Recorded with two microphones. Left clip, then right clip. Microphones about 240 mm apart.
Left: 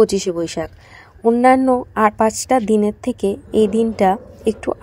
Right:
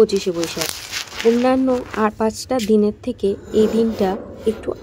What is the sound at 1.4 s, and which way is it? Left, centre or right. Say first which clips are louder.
A woman's voice: left 5 dB; centre.